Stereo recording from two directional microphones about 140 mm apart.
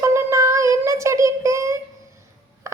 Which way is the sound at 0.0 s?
20° right (ahead or behind).